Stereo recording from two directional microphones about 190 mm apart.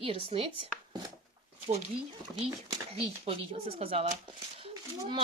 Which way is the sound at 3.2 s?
30° right (ahead or behind).